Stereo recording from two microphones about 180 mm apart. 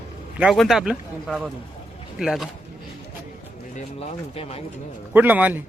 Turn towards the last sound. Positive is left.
turn(degrees=-10)  # may be behind; listen again after turning